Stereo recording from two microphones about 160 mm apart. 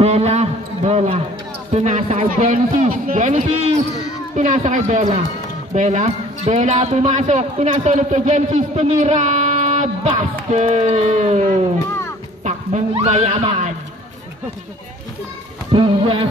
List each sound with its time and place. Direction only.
0.0 s a sound: 45° right (ahead or behind)
1.7 s speech: 45° right (ahead or behind)
2.5 s speech: 55° right (ahead or behind); by 13.7 s 40° right (ahead or behind)
15.7 s music: 35° right (ahead or behind)